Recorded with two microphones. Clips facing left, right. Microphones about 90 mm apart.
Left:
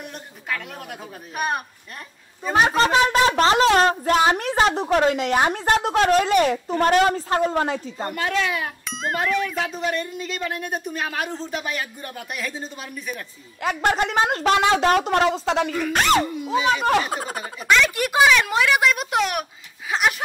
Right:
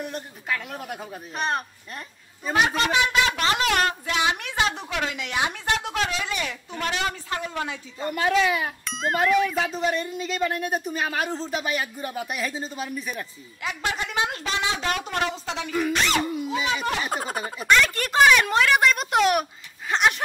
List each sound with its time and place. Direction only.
0.0 s speech: centre (ahead or behind)
2.5 s a woman's voice: 35° left (ahead or behind)
8.1 s speech: 5° right (ahead or behind)
13.6 s a woman's voice: 50° left (ahead or behind)
17.0 s speech: centre (ahead or behind)
17.9 s speech: 10° left (ahead or behind)